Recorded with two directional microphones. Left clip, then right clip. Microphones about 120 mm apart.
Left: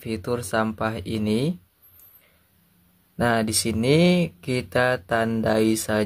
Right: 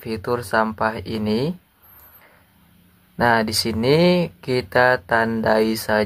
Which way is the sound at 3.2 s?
30° left (ahead or behind).